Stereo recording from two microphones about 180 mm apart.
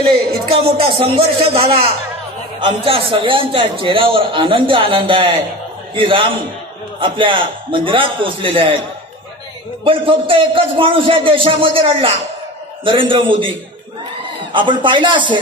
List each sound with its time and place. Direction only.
0.0 s a sound: 60° right (ahead or behind)
0.5 s a man's voice: 35° right (ahead or behind)
9.8 s a man's voice: 30° right (ahead or behind)